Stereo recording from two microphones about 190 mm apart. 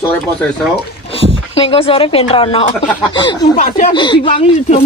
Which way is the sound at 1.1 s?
30° left (ahead or behind).